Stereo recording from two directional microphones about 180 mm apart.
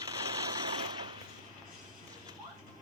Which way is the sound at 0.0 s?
20° right (ahead or behind).